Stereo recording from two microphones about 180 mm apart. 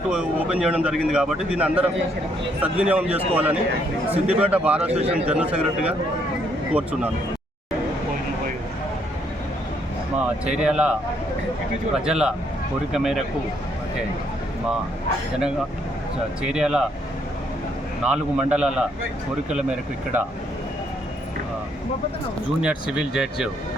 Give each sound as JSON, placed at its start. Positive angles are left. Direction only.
{"t": 0.1, "sound": "a man's voice", "side_deg": -5}
{"t": 4.9, "sound": "a man's voice", "side_deg": -35}
{"t": 5.1, "sound": "a man's voice", "side_deg": -5}
{"t": 10.4, "sound": "a man's voice", "side_deg": -5}
{"t": 12.0, "sound": "a man's voice", "side_deg": -5}
{"t": 16.4, "sound": "a man's voice", "side_deg": -5}
{"t": 18.0, "sound": "a man's voice", "side_deg": -5}
{"t": 20.1, "sound": "a man's voice", "side_deg": -10}
{"t": 22.6, "sound": "a man's voice", "side_deg": -5}